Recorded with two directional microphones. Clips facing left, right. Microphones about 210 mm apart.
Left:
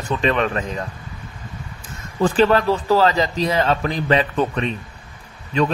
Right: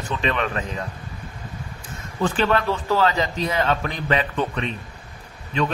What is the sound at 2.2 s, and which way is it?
A man's voice, 35° left (ahead or behind).